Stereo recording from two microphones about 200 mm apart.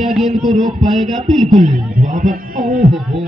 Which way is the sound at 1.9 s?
40° right (ahead or behind).